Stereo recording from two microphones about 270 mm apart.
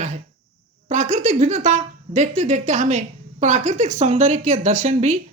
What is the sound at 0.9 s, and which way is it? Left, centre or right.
Speech, right.